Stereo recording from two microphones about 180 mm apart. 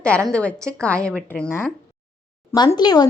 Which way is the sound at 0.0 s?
5° left (ahead or behind).